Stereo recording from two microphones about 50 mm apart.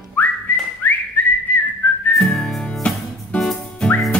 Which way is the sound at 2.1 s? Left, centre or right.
Centre.